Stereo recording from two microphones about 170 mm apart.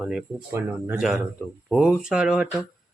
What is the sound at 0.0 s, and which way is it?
Speech, 5° right (ahead or behind).